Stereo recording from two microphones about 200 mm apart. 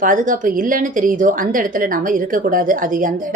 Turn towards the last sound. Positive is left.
turn(degrees=-40)  # may be behind; listen again after turning